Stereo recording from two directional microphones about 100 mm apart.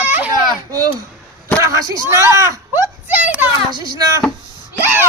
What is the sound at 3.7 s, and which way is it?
Speech, 40° right (ahead or behind).